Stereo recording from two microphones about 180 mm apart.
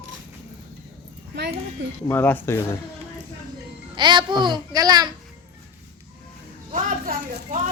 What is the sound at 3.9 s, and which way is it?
A child's voice, 25° right (ahead or behind).